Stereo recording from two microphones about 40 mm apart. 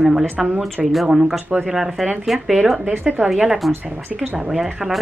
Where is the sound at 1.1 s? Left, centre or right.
Centre.